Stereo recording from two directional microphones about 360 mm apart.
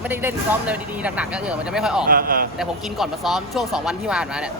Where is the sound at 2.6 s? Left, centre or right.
Centre.